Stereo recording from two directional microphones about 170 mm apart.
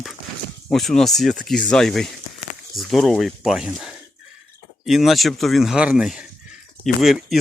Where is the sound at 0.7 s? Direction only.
Centre (ahead or behind).